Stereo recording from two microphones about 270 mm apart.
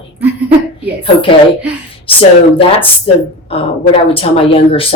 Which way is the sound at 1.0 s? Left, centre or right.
Centre.